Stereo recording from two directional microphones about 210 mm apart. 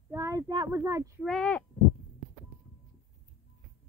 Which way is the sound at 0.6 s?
10° right (ahead or behind).